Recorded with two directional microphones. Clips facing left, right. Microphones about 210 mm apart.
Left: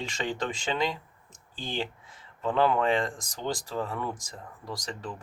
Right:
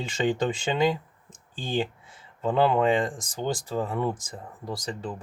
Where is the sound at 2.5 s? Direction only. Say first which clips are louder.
Right 3 dB; 25° right (ahead or behind).